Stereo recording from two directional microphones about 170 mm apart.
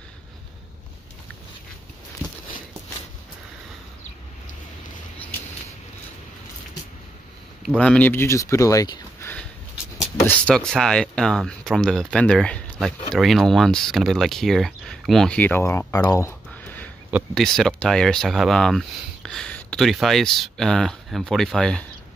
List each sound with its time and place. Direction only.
7.6 s speech: 5° left (ahead or behind); by 9.3 s 20° left (ahead or behind)
10.2 s speech: 5° left (ahead or behind)
15.9 s a sound: 20° left (ahead or behind)
17.3 s speech: 5° left (ahead or behind)